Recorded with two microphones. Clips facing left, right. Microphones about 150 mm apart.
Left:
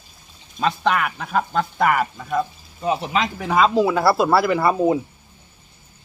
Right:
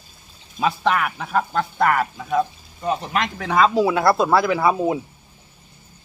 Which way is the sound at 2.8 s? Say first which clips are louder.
Left 1 dB; 10° left (ahead or behind).